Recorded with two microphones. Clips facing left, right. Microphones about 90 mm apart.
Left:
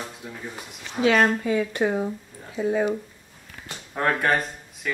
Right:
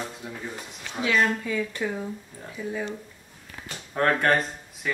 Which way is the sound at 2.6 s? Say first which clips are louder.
Left 8 dB; 55° left (ahead or behind).